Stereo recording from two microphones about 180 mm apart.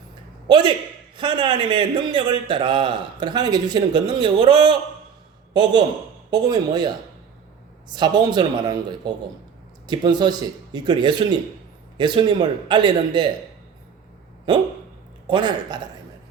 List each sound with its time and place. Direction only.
0.4 s a sound: 25° right (ahead or behind)
1.1 s a man's voice: 25° right (ahead or behind)
6.3 s a man's voice: 20° right (ahead or behind)
15.3 s a man's voice: 25° right (ahead or behind)